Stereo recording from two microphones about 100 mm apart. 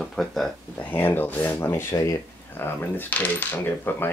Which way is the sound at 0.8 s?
20° left (ahead or behind).